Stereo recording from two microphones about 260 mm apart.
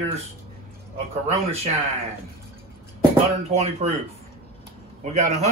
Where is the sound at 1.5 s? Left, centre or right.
Right.